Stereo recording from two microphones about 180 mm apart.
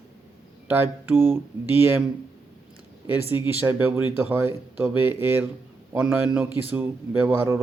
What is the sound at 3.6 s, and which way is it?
Speech, 10° right (ahead or behind).